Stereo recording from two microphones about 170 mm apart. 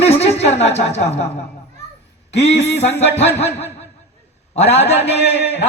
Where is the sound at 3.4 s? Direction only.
40° left (ahead or behind).